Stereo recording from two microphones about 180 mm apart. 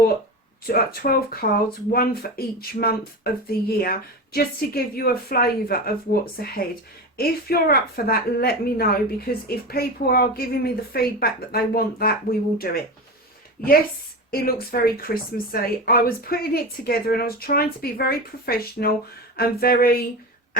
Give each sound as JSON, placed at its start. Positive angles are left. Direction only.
{"t": 0.7, "sound": "a woman's voice", "side_deg": 55}
{"t": 14.3, "sound": "a woman's voice", "side_deg": 55}